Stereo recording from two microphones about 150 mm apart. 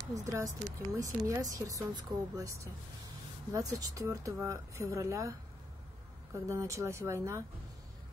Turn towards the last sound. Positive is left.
turn(degrees=-20)  # may be behind; listen again after turning